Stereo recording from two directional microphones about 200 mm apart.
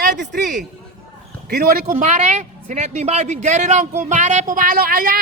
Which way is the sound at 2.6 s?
35° right (ahead or behind).